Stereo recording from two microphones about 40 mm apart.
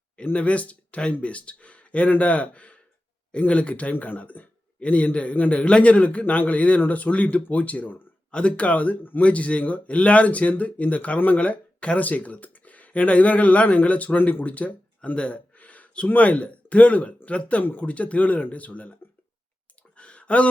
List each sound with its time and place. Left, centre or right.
0.3 s speech: left
3.9 s a man's voice: left
8.3 s speech: left
14.2 s speech: left
14.4 s speech: left
15.1 s speech: left
15.5 s a sound: left
16.0 s speech: left
20.0 s a sound: left